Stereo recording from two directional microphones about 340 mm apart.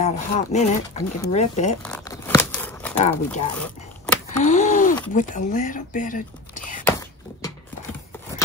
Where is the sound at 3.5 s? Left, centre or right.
Centre.